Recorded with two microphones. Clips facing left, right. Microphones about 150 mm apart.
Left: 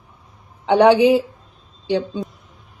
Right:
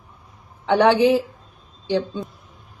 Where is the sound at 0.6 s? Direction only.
20° left (ahead or behind).